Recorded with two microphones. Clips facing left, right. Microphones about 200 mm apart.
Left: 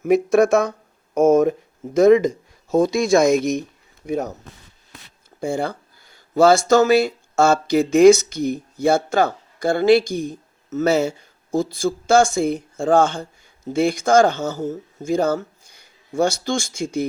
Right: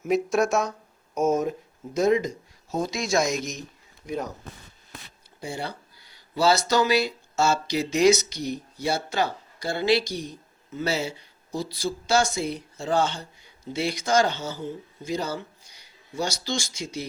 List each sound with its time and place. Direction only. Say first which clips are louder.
0.0 s speech: left 7 dB; 55° left (ahead or behind)
5.4 s speech: left 10 dB; 50° left (ahead or behind)